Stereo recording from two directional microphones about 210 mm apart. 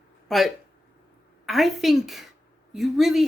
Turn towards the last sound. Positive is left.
turn(degrees=0)  # may be behind; listen again after turning